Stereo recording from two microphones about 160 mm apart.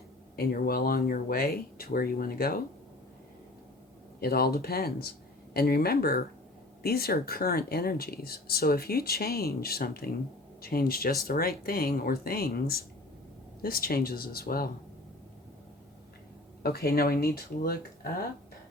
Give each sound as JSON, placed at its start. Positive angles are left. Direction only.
{"t": 0.3, "sound": "speech", "side_deg": 70}
{"t": 4.2, "sound": "speech", "side_deg": 75}
{"t": 16.6, "sound": "speech", "side_deg": 75}